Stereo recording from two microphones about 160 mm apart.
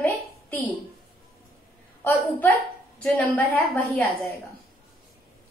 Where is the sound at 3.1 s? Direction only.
10° left (ahead or behind).